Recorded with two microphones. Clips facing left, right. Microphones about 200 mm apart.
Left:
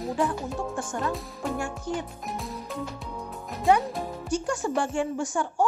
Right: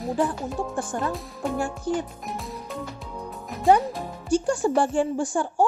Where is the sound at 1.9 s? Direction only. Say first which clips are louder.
Right 5 dB; 35° right (ahead or behind).